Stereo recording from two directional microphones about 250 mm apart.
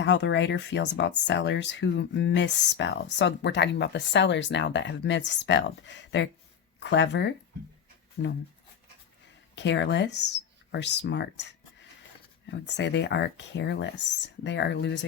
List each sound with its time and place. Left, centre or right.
0.0 s speech: left
9.6 s speech: left